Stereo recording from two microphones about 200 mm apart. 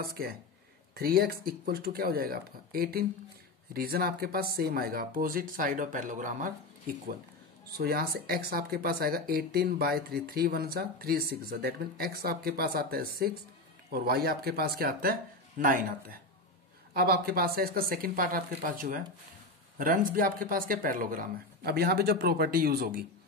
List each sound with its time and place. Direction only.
0.0 s speech: 50° right (ahead or behind)
7.7 s speech: 50° right (ahead or behind)